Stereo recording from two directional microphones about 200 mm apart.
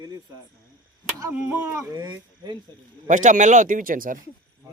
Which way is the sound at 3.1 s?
40° right (ahead or behind).